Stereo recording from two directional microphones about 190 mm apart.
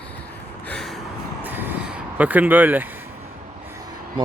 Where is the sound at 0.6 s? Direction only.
5° left (ahead or behind).